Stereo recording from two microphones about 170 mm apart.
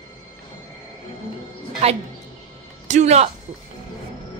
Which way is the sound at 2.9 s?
40° right (ahead or behind).